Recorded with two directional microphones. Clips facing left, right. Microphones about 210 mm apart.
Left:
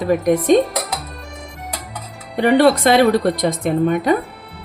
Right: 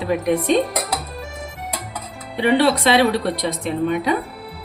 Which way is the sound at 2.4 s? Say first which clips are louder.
Left 4 dB; 45° left (ahead or behind).